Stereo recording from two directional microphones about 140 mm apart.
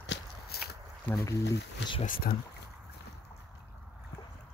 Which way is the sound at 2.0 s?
90° left.